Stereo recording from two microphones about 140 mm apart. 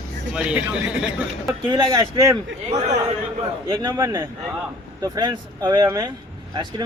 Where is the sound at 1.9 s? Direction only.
20° right (ahead or behind).